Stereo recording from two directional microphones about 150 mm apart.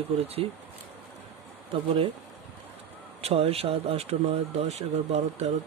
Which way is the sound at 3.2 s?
45° right (ahead or behind).